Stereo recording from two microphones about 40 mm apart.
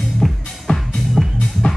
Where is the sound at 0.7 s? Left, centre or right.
Left.